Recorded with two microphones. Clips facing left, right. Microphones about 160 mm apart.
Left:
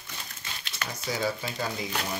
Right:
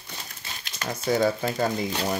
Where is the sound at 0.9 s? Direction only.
55° right (ahead or behind).